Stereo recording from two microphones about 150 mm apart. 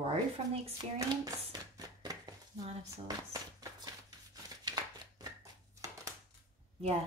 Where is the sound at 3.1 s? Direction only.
25° right (ahead or behind).